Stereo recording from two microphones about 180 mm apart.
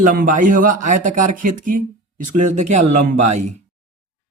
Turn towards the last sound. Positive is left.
turn(degrees=-40)  # may be behind; listen again after turning